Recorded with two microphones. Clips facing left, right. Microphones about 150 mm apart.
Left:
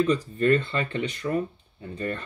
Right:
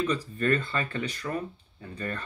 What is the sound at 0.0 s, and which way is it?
Speech, 25° left (ahead or behind).